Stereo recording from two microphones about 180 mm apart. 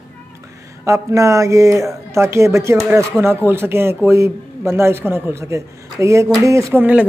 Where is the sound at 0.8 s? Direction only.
15° right (ahead or behind).